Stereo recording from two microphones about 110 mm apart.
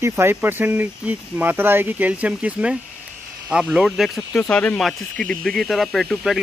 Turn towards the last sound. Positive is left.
turn(degrees=0)  # may be behind; listen again after turning